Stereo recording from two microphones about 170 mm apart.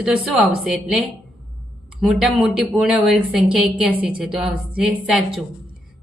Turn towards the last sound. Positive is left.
turn(degrees=0)  # may be behind; listen again after turning